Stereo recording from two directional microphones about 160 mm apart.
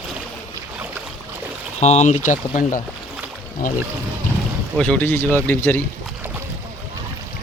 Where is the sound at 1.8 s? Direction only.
45° left (ahead or behind).